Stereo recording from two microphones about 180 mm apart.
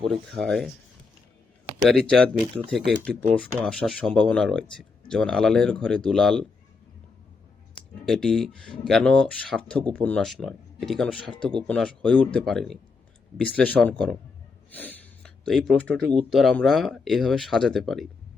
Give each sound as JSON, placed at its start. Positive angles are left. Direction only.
{"t": 0.0, "sound": "speech", "side_deg": 0}
{"t": 1.8, "sound": "speech", "side_deg": 0}
{"t": 8.0, "sound": "speech", "side_deg": 5}
{"t": 11.2, "sound": "speech", "side_deg": 30}
{"t": 11.7, "sound": "speech", "side_deg": 5}
{"t": 14.7, "sound": "gasp", "side_deg": 10}
{"t": 16.3, "sound": "speech", "side_deg": 0}